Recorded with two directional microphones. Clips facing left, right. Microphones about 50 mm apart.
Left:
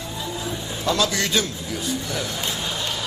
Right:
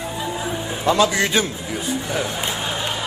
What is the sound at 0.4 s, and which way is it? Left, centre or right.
Music, right.